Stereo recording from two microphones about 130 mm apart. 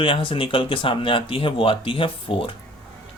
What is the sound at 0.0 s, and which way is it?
Speech, 40° left (ahead or behind).